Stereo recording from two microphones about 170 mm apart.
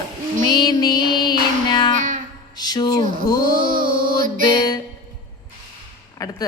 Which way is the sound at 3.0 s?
55° right (ahead or behind).